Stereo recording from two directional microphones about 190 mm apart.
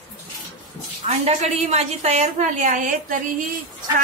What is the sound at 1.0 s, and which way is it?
A woman's voice, 35° right (ahead or behind).